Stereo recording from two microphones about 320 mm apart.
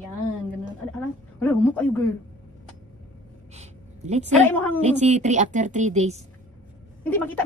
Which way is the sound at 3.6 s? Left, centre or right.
Right.